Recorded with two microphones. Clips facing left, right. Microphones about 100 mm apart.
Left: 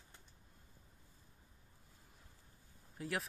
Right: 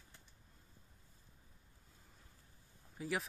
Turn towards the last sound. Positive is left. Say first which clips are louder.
# right 1 dB
turn(degrees=0)  # may be behind; listen again after turning